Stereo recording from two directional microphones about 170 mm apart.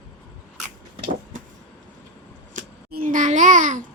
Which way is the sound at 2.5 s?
55° right (ahead or behind).